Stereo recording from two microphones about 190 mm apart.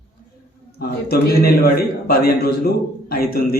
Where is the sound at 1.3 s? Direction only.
55° left (ahead or behind).